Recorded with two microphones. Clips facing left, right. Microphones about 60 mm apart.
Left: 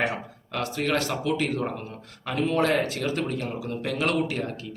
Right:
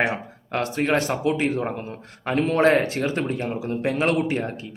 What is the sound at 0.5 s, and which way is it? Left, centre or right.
A man's voice, right.